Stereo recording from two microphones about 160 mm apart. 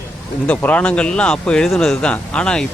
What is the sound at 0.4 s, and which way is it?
Speech, 10° left (ahead or behind).